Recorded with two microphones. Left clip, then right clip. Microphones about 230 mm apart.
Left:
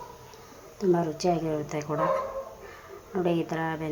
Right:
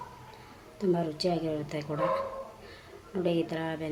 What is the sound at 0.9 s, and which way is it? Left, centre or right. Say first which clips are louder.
Speech: left 4 dB; centre.